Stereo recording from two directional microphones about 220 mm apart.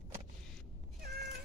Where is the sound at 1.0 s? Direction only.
45° right (ahead or behind).